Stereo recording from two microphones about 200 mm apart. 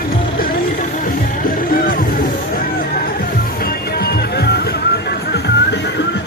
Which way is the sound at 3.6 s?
50° left (ahead or behind).